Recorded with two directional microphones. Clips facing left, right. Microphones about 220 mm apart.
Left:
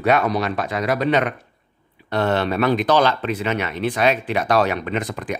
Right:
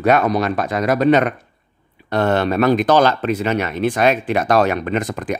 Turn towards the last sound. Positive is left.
turn(degrees=-45)  # may be behind; listen again after turning